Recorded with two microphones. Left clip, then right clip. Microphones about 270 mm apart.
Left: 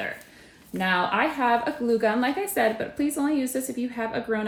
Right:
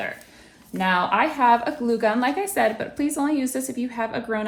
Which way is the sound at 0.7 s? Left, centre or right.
Centre.